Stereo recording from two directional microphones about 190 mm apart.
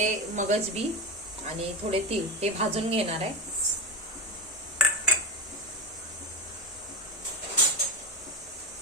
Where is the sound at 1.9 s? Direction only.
30° right (ahead or behind).